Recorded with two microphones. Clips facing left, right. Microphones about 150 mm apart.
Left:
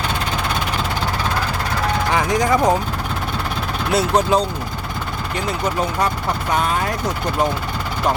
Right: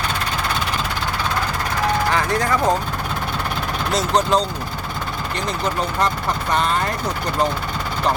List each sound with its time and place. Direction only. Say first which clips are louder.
2.1 s speech: left 3 dB; 15° left (ahead or behind)
3.9 s speech: left 2 dB; 10° left (ahead or behind)
6.5 s speech: even; 10° left (ahead or behind)